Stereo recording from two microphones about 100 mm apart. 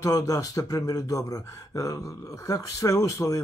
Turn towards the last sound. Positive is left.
turn(degrees=35)  # may be behind; listen again after turning